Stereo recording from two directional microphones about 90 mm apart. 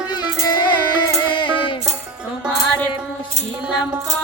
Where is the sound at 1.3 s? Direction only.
65° left (ahead or behind).